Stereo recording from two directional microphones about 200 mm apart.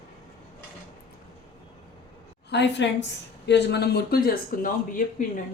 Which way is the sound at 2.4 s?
60° left (ahead or behind).